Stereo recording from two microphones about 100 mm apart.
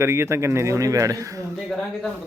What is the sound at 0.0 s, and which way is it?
Speech, 25° right (ahead or behind).